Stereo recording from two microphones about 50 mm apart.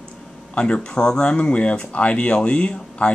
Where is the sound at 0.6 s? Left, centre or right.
Centre.